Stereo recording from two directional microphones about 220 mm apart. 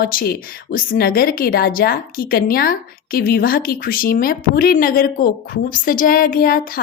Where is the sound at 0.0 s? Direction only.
40° left (ahead or behind).